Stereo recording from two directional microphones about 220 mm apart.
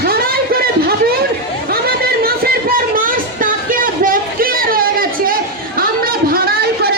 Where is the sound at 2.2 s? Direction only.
40° right (ahead or behind).